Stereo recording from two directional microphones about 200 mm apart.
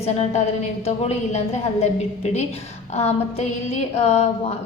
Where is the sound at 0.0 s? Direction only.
35° left (ahead or behind).